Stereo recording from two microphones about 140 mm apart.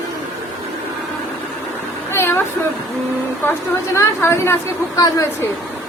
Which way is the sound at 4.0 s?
20° left (ahead or behind).